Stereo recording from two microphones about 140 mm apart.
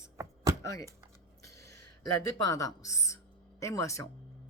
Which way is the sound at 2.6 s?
25° left (ahead or behind).